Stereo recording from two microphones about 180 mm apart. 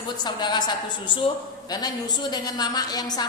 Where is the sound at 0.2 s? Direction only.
25° left (ahead or behind).